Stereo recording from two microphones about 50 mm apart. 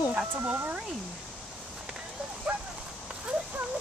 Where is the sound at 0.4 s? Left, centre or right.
Right.